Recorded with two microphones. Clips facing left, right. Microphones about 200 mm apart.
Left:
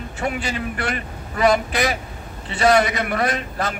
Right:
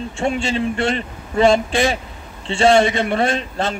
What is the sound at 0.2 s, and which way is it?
A man's voice, 25° right (ahead or behind).